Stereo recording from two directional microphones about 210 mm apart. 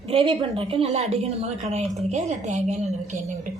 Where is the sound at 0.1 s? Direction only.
25° right (ahead or behind).